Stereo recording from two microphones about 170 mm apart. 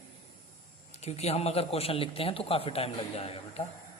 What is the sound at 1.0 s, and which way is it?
A man's voice, 40° left (ahead or behind).